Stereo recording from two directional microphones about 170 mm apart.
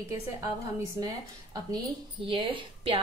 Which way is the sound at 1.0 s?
20° right (ahead or behind).